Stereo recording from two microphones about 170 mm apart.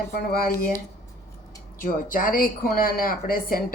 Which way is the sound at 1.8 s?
55° left (ahead or behind).